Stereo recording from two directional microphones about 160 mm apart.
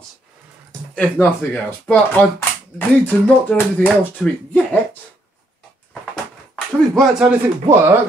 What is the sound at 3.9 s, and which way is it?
Speech, 5° left (ahead or behind).